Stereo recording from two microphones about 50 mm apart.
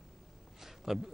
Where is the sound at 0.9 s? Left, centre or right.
Centre.